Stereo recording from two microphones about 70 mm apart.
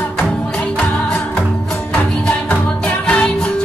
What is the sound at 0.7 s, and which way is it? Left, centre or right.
Music, centre.